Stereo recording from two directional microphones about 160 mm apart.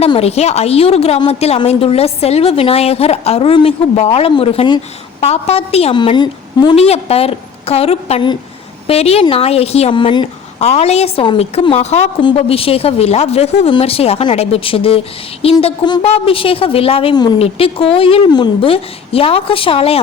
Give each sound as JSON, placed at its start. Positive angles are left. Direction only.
{"t": 0.0, "sound": "a woman's voice", "side_deg": 40}
{"t": 10.6, "sound": "a woman's voice", "side_deg": 40}
{"t": 15.6, "sound": "a sound", "side_deg": 30}
{"t": 16.0, "sound": "a woman's voice", "side_deg": 35}